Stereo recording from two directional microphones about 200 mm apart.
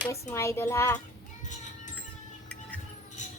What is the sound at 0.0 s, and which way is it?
Speech, 15° left (ahead or behind).